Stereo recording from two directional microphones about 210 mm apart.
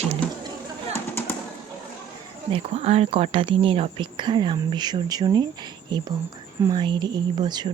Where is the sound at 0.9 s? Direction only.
10° left (ahead or behind).